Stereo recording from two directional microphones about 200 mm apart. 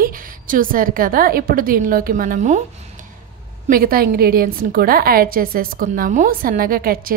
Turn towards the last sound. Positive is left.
turn(degrees=-45)  # may be behind; listen again after turning